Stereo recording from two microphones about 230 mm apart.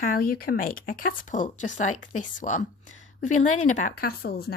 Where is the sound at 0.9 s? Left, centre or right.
Left.